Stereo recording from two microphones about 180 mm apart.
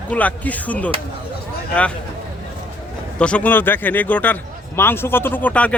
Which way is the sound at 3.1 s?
5° left (ahead or behind).